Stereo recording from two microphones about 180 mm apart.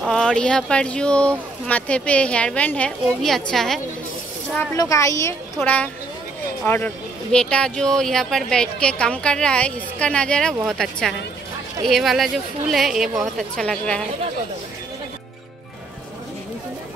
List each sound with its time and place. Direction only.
0.0 s a woman's voice: 5° left (ahead or behind)
4.6 s a woman's voice: 20° left (ahead or behind)